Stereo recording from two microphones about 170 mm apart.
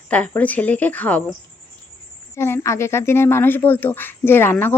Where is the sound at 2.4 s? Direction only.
15° left (ahead or behind).